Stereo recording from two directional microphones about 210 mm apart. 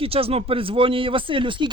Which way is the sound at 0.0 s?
25° right (ahead or behind).